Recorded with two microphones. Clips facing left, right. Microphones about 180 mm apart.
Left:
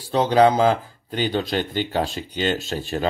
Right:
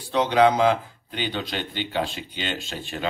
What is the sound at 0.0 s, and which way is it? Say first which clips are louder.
Speech: left 2 dB; 35° left (ahead or behind).